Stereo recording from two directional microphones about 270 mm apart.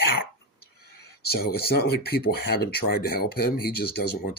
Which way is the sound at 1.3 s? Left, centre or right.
Left.